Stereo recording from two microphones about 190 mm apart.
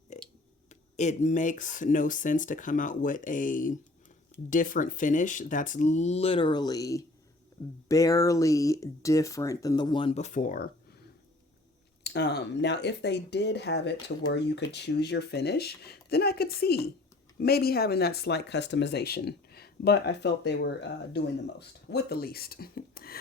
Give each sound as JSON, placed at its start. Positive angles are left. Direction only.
{"t": 0.1, "sound": "a sound", "side_deg": 40}
{"t": 0.7, "sound": "speech", "side_deg": 40}
{"t": 12.0, "sound": "speech", "side_deg": 60}